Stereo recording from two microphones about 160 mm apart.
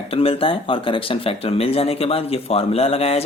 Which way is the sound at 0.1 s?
35° left (ahead or behind).